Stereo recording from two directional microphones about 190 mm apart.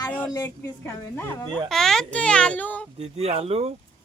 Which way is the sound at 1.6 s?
Centre (ahead or behind).